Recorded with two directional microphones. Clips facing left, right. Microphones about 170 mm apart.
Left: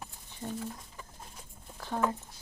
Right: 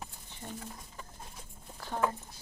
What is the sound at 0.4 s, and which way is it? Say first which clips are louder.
Speech: left 6 dB; 5° left (ahead or behind).